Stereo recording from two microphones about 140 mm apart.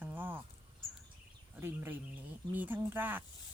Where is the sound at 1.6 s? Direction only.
15° right (ahead or behind).